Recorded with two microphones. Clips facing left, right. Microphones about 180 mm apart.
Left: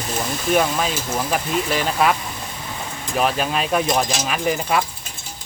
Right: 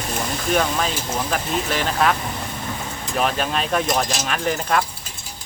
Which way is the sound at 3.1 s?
5° left (ahead or behind).